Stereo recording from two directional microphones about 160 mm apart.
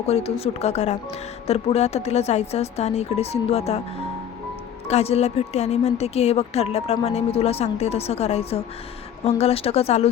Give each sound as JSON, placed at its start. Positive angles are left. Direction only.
{"t": 0.1, "sound": "a woman's voice", "side_deg": 40}
{"t": 4.9, "sound": "a woman's voice", "side_deg": 40}